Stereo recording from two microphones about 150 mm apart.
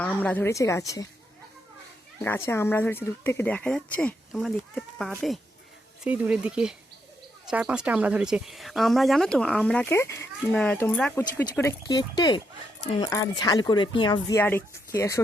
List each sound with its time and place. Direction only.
0.0 s speech: 10° left (ahead or behind)
2.2 s speech: 15° left (ahead or behind)
11.9 s speech: 25° left (ahead or behind)
14.3 s speech: 15° left (ahead or behind)